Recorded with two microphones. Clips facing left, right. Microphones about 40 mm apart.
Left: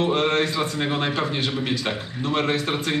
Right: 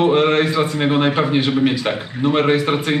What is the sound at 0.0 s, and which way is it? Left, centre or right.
Speech, centre.